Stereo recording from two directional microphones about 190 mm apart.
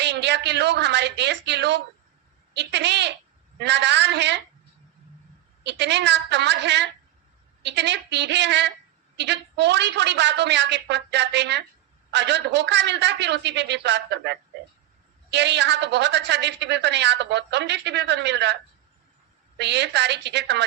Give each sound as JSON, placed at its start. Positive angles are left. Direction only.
{"t": 0.0, "sound": "a woman's voice", "side_deg": -65}
{"t": 5.6, "sound": "a woman's voice", "side_deg": -65}
{"t": 19.5, "sound": "a woman's voice", "side_deg": -65}